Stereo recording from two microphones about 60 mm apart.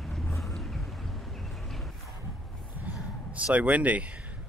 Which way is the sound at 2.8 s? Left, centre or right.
Right.